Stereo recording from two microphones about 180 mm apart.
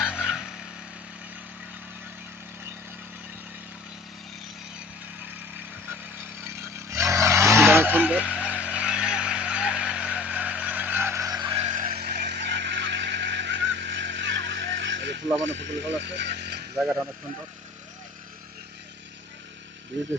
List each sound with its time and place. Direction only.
0.0 s vehicle: 5° right (ahead or behind)
6.9 s vehicle: 15° right (ahead or behind)
11.6 s vehicle: 45° right (ahead or behind); by 15.2 s 80° right
15.6 s a sound: 75° right (ahead or behind)